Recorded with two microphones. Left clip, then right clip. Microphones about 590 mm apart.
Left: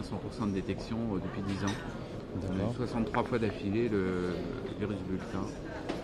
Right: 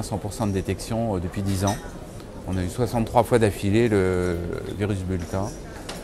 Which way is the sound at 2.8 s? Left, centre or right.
Right.